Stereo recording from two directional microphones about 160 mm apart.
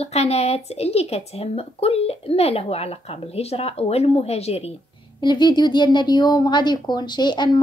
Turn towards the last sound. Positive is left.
turn(degrees=30)  # may be behind; listen again after turning